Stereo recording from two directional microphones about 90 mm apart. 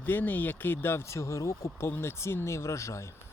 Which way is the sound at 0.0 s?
20° left (ahead or behind).